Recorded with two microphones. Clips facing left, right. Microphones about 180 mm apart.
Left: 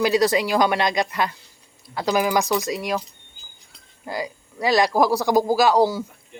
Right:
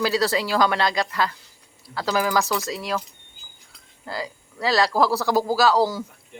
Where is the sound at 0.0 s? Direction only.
20° left (ahead or behind).